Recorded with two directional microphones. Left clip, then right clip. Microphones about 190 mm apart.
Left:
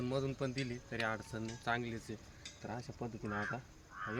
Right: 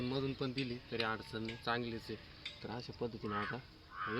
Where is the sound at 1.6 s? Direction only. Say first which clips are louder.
Left 1 dB; 25° left (ahead or behind).